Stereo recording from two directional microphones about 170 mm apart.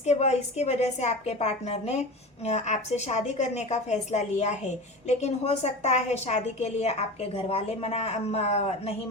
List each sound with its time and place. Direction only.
0.0 s a woman's voice: 40° left (ahead or behind)